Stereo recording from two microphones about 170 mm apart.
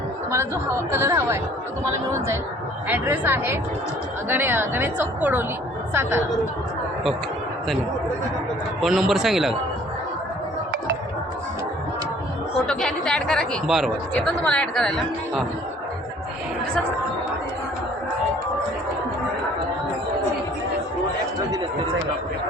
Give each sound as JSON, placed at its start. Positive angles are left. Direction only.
{"t": 0.3, "sound": "a woman's voice", "side_deg": -15}
{"t": 8.8, "sound": "speech", "side_deg": 0}
{"t": 12.6, "sound": "speech", "side_deg": 5}